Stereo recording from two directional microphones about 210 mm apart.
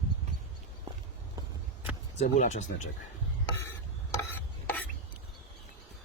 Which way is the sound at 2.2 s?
35° left (ahead or behind).